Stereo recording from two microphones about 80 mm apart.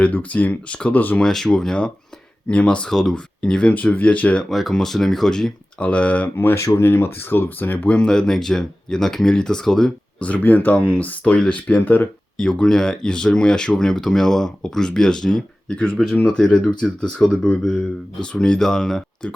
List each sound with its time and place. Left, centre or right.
0.0 s speech: centre
1.2 s speech: centre
4.4 s speech: centre
5.8 s speech: centre
6.3 s speech: left
7.9 s speech: centre
10.2 s speech: left
11.3 s speech: centre